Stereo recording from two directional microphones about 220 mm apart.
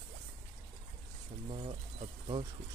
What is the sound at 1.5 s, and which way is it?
Speech, 25° right (ahead or behind).